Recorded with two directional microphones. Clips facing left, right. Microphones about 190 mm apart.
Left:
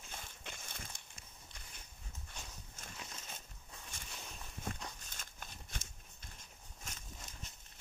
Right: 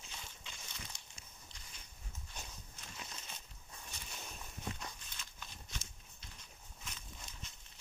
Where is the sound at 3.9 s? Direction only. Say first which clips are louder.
Right 1 dB; 50° left (ahead or behind).